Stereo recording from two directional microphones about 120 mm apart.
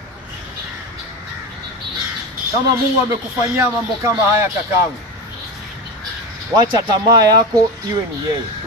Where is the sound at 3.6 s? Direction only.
25° right (ahead or behind).